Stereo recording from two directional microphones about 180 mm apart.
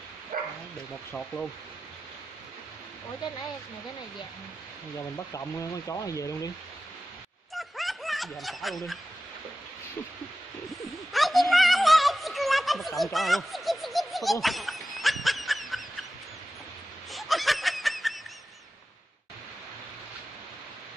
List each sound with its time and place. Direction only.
0.3 s bow-wow: 50° right (ahead or behind)
1.1 s speech: 5° left (ahead or behind)
5.1 s speech: 15° left (ahead or behind)
7.5 s snicker: centre (ahead or behind)
11.1 s a sound: centre (ahead or behind)
17.1 s snicker: centre (ahead or behind)